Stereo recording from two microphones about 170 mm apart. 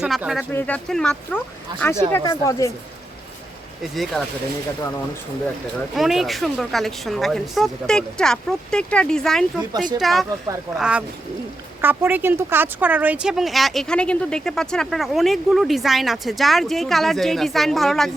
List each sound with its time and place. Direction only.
0.0 s a woman's voice: 5° right (ahead or behind)
2.1 s speech: 20° left (ahead or behind)
3.9 s a woman's voice: centre (ahead or behind)
5.9 s a woman's voice: centre (ahead or behind)